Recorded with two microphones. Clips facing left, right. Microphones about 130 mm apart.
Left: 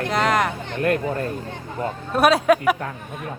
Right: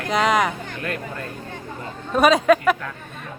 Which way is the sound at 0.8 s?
40° left (ahead or behind).